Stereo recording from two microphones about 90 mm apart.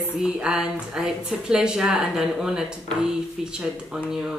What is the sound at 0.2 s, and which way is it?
Speech, 10° right (ahead or behind).